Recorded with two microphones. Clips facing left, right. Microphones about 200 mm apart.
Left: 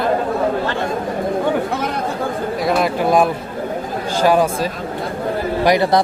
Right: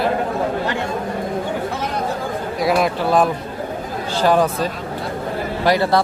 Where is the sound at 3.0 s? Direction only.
15° left (ahead or behind).